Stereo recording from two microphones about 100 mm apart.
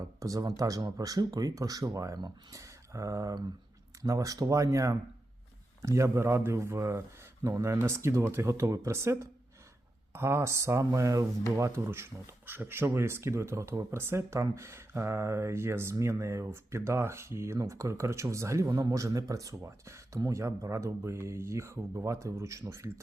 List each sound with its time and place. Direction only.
0.0 s speech: 35° right (ahead or behind)